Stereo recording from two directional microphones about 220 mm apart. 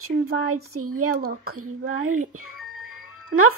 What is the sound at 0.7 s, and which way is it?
Speech, 90° right.